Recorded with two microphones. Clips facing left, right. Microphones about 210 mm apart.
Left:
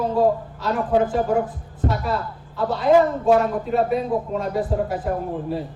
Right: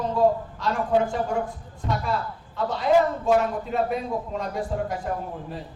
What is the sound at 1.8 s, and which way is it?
Speech, 50° left (ahead or behind).